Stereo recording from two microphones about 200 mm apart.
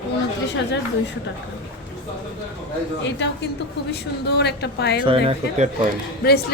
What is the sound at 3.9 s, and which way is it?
A woman's voice, 55° left (ahead or behind).